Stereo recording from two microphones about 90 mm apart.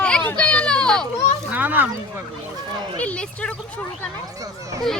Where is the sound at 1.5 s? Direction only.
20° right (ahead or behind).